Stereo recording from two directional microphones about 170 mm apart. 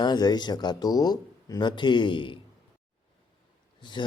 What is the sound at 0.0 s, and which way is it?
Speech, 25° left (ahead or behind).